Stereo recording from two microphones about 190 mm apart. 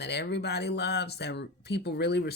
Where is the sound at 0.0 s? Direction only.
60° left (ahead or behind).